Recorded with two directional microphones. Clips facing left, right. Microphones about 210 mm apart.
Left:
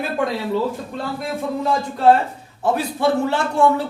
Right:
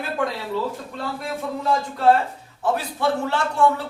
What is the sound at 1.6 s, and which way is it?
Speech, 20° left (ahead or behind).